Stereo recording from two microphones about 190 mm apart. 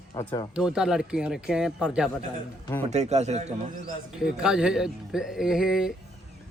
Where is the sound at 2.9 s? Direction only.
35° right (ahead or behind).